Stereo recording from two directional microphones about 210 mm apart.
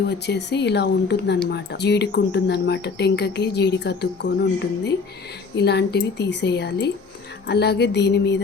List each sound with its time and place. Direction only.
0.0 s speech: 50° left (ahead or behind)